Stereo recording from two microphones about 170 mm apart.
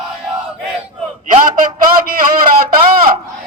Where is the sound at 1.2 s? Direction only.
50° right (ahead or behind).